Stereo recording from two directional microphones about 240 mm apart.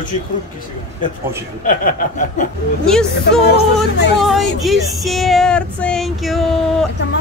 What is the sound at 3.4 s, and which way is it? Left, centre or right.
Music, left.